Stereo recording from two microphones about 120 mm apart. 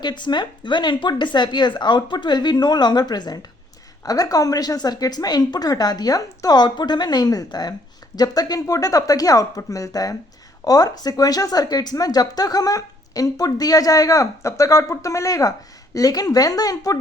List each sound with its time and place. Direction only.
0.0 s speech: 40° left (ahead or behind)